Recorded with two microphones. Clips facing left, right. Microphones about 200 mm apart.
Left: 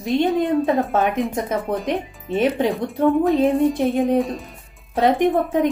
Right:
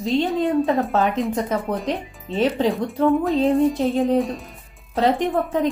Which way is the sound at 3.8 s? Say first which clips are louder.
Left 1 dB; 15° left (ahead or behind).